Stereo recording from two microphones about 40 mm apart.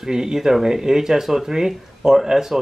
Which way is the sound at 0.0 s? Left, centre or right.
Centre.